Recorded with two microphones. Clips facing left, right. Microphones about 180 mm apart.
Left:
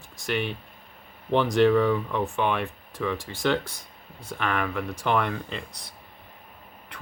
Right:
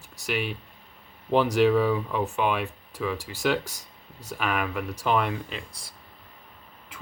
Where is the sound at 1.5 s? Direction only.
5° right (ahead or behind).